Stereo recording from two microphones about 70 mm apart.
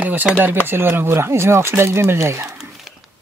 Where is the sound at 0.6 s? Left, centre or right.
Right.